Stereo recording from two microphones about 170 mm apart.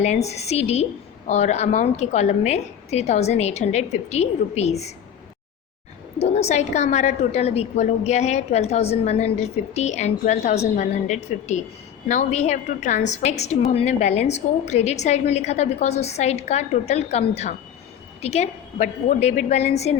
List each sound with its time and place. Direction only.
0.0 s a woman's voice: 40° left (ahead or behind)
6.1 s a woman's voice: 40° left (ahead or behind)